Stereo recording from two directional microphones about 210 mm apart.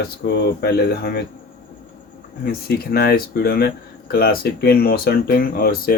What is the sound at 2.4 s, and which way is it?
Speech, 45° left (ahead or behind).